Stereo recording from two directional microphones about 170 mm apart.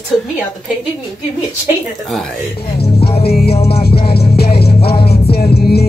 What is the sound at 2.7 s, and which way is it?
Music, 35° left (ahead or behind).